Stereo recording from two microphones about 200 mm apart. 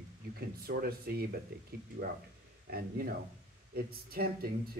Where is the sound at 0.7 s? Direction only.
50° right (ahead or behind).